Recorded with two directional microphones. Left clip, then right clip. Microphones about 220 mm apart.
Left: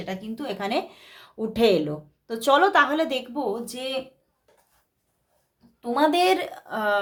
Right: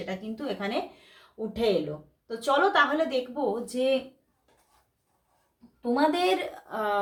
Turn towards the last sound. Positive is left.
turn(degrees=30)  # may be behind; listen again after turning